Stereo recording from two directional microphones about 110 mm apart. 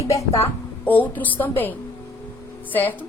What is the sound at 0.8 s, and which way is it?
A woman's voice, 15° left (ahead or behind).